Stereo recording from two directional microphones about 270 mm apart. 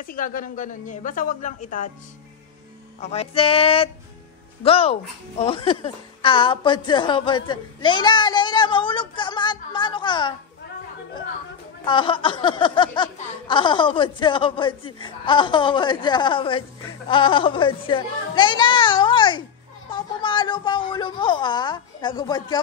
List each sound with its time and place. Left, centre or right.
0.0 s speech: left
3.0 s a woman's voice: left
11.8 s speech: centre